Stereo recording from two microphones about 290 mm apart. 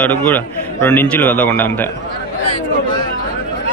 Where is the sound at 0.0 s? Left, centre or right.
Centre.